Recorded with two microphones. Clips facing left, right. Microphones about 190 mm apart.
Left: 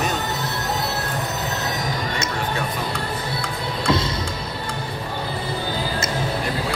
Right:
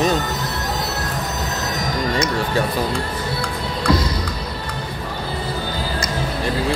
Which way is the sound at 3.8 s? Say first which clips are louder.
Right 2 dB; 25° left (ahead or behind).